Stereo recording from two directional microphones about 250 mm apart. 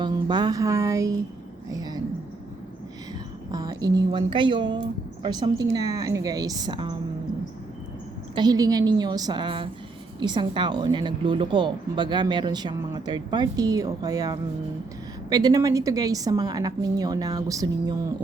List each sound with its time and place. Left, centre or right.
0.0 s speech: centre
1.7 s a sound: centre
3.5 s a woman's voice: centre
8.4 s a woman's voice: centre